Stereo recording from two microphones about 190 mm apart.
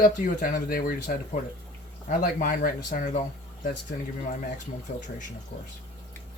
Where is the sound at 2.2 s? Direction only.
45° left (ahead or behind).